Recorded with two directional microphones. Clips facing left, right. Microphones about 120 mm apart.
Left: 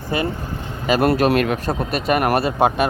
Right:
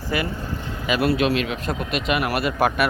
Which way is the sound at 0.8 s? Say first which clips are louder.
Left 4 dB; 40° left (ahead or behind).